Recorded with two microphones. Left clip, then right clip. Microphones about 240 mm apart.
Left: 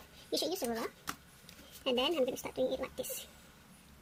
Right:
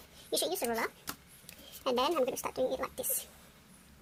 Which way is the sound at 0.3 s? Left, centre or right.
Centre.